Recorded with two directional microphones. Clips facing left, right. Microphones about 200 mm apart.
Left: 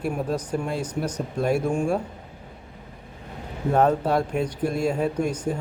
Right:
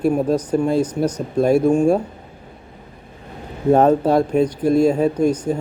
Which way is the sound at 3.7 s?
40° right (ahead or behind).